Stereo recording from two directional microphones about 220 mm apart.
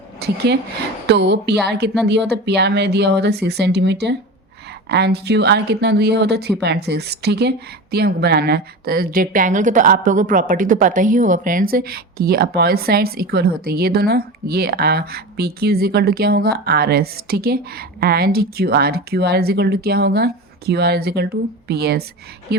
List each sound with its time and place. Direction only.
0.2 s speech: 50° right (ahead or behind)